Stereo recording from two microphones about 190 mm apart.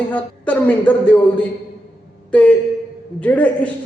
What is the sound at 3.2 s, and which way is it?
Speech, 10° left (ahead or behind).